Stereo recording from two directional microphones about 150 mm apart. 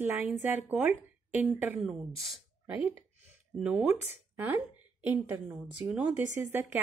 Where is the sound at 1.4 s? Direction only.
10° right (ahead or behind).